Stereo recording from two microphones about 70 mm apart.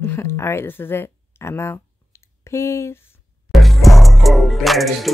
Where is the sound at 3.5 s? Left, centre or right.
Centre.